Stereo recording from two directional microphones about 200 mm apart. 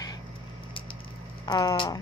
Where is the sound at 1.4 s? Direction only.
20° left (ahead or behind).